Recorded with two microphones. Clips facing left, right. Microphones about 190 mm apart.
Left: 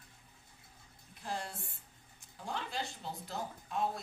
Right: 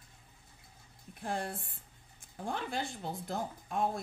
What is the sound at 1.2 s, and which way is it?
A woman's voice, 55° right (ahead or behind).